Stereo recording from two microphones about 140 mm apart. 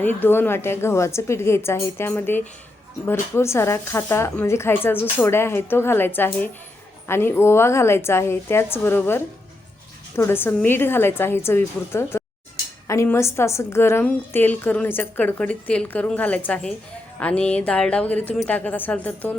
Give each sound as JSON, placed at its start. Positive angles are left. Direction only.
{"t": 0.0, "sound": "a woman's voice", "side_deg": 15}